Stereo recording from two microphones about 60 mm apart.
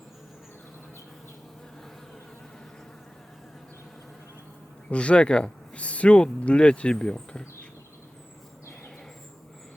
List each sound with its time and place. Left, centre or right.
4.9 s speech: centre